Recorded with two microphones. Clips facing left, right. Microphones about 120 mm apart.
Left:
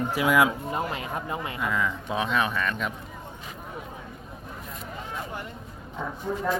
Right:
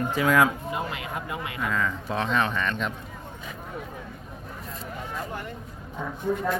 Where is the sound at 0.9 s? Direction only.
35° left (ahead or behind).